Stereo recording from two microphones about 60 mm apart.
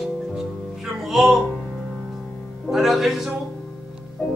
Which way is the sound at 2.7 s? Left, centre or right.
Centre.